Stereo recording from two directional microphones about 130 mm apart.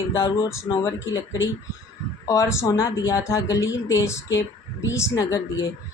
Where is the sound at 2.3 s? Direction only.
25° left (ahead or behind).